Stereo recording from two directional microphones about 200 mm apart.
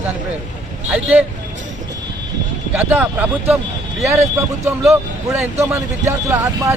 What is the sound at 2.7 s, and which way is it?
A man's voice, 10° right (ahead or behind).